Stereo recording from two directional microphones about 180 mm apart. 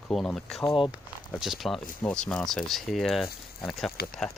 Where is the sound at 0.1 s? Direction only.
Centre (ahead or behind).